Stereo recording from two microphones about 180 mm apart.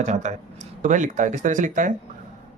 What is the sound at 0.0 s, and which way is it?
Speech, 45° right (ahead or behind).